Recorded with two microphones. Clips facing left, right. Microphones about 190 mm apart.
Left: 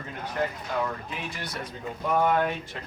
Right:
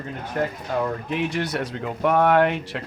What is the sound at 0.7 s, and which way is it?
Speech, 40° right (ahead or behind).